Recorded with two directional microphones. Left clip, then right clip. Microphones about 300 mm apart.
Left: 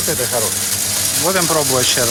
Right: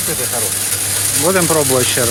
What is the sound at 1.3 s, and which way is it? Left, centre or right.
Speech, centre.